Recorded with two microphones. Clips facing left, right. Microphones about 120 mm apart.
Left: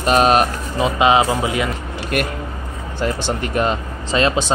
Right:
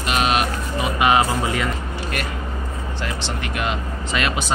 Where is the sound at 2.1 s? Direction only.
55° left (ahead or behind).